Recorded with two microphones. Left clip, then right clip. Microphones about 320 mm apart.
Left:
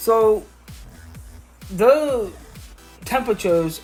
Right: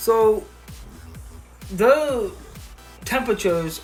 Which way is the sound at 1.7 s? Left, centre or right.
Centre.